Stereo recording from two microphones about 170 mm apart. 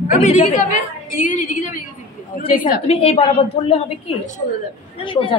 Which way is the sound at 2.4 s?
35° left (ahead or behind).